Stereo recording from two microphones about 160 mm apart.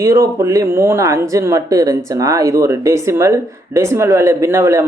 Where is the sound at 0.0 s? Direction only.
20° right (ahead or behind).